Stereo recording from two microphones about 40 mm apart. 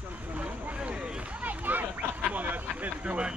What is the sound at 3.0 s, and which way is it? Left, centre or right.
Speech, right.